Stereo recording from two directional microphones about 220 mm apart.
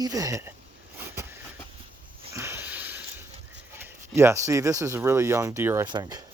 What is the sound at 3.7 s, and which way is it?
Speech, 10° right (ahead or behind).